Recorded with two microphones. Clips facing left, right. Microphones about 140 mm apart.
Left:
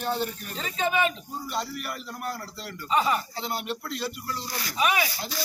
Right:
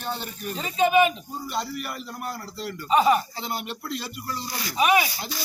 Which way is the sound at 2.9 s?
15° right (ahead or behind).